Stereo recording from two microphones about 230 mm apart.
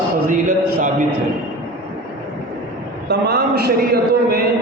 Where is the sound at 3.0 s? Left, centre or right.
Right.